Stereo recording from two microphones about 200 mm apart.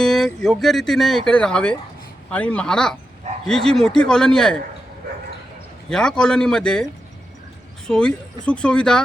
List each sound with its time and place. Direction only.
0.0 s a sound: centre (ahead or behind)
0.4 s speech: centre (ahead or behind)
5.9 s speech: 5° left (ahead or behind)
7.9 s speech: 5° left (ahead or behind)